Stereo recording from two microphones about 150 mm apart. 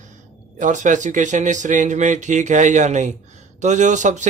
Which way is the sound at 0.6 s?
55° right (ahead or behind).